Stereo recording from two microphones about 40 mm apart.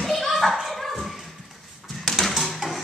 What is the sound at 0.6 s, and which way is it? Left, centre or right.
Dog, centre.